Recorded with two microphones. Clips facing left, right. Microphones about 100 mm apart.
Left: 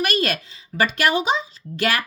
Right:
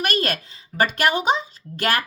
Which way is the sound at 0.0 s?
45° right (ahead or behind).